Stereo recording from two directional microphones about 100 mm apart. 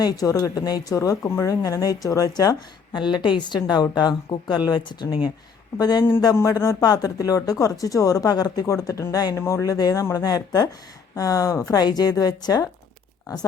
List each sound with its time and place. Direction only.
0.0 s a woman's voice: 35° left (ahead or behind)
6.3 s speech: 30° left (ahead or behind)